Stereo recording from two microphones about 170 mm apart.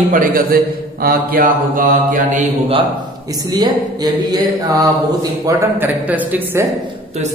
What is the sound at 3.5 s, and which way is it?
A man's voice, 25° right (ahead or behind).